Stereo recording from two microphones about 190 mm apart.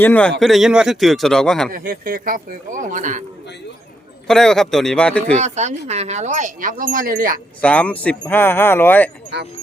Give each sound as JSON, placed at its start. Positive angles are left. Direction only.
{"t": 0.0, "sound": "speech", "side_deg": 10}
{"t": 1.7, "sound": "speech", "side_deg": -50}
{"t": 4.3, "sound": "speech", "side_deg": 5}
{"t": 5.4, "sound": "speech", "side_deg": -35}
{"t": 7.6, "sound": "speech", "side_deg": 5}
{"t": 9.3, "sound": "speech", "side_deg": -60}